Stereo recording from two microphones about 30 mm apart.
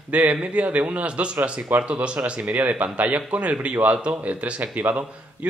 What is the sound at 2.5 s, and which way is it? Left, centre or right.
A man's voice, right.